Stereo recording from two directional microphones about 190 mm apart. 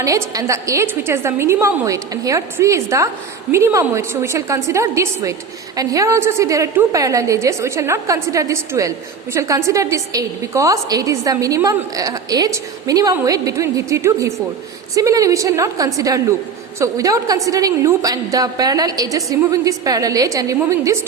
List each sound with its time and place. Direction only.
0.0 s a woman's voice: 15° right (ahead or behind)